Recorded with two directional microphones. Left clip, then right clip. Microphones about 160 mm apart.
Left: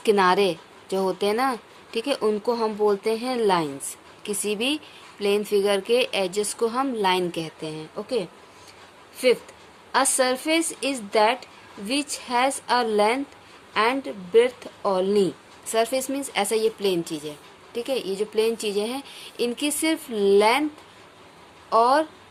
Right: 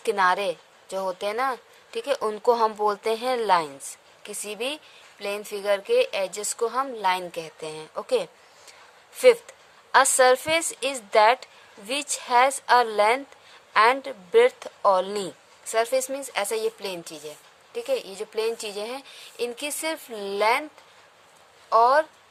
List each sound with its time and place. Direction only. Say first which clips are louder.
0.0 s speech: left 3 dB; 20° right (ahead or behind)
21.7 s speech: even; 35° right (ahead or behind)